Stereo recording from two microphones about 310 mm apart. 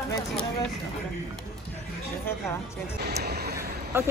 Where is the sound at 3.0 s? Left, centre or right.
Right.